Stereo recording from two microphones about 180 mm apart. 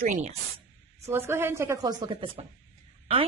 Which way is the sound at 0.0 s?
45° right (ahead or behind).